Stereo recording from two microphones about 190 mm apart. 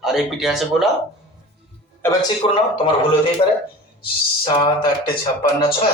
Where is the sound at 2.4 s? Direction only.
25° left (ahead or behind).